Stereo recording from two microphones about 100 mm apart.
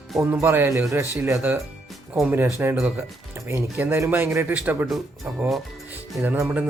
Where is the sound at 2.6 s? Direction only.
20° right (ahead or behind).